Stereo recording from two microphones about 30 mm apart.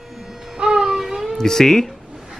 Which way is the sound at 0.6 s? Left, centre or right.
Right.